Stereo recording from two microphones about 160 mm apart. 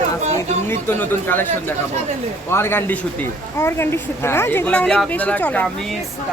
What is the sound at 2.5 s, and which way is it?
A woman's voice, 15° left (ahead or behind).